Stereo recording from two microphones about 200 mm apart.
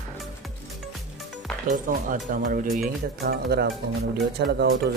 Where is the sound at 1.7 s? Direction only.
45° right (ahead or behind).